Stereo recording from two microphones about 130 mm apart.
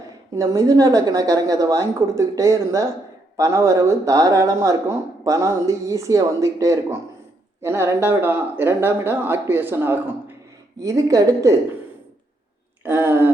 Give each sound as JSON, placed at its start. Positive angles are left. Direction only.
{"t": 0.3, "sound": "speech", "side_deg": -25}
{"t": 12.8, "sound": "speech", "side_deg": -15}